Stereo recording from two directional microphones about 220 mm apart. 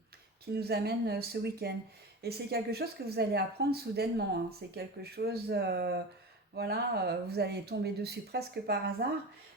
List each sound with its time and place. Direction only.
0.5 s speech: 45° right (ahead or behind)